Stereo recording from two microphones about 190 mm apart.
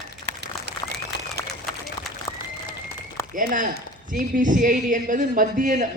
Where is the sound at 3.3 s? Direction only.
45° right (ahead or behind).